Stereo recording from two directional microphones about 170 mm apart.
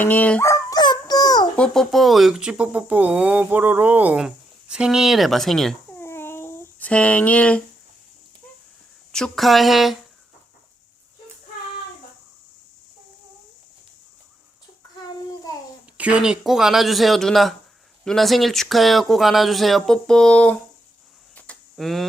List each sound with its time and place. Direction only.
0.0 s dog: 10° left (ahead or behind)
1.5 s speech: 5° left (ahead or behind)
6.0 s a sound: 15° left (ahead or behind)
9.1 s speech: 5° left (ahead or behind)
16.0 s speech: 5° right (ahead or behind)
21.3 s a sound: 5° left (ahead or behind)